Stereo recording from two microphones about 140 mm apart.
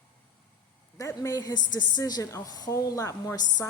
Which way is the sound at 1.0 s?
25° left (ahead or behind).